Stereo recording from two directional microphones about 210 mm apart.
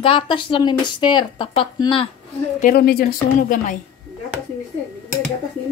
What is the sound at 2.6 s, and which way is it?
A woman's voice, 50° left (ahead or behind).